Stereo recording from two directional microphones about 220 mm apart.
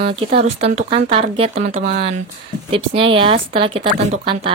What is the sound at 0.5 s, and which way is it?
Speech, 30° right (ahead or behind).